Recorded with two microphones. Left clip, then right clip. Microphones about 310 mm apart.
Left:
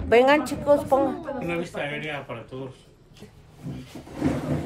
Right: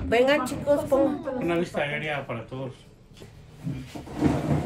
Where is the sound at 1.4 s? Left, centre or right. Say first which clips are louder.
Right 4 dB; right.